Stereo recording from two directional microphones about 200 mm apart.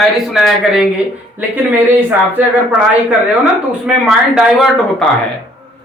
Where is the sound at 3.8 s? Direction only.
5° right (ahead or behind).